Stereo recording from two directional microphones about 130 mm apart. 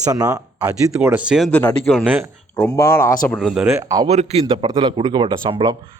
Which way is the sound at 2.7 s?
20° left (ahead or behind).